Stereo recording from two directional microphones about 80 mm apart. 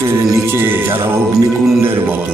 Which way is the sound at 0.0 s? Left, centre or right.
Right.